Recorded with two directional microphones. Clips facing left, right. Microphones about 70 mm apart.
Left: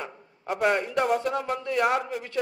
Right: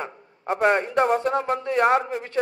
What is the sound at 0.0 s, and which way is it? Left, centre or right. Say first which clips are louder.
A man's voice: right 4 dB; right.